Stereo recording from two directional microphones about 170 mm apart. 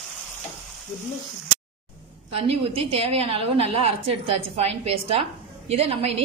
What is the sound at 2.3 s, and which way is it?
A woman's voice, 35° right (ahead or behind).